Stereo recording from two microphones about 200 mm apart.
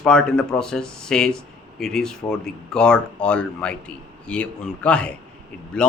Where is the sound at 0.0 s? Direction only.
5° left (ahead or behind).